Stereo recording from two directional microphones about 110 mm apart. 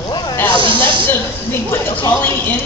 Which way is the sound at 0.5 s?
50° right (ahead or behind).